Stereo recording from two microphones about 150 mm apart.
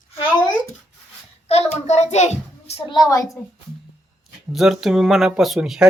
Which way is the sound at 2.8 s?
30° left (ahead or behind).